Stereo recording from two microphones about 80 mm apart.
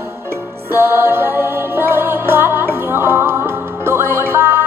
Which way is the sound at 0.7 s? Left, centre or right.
Right.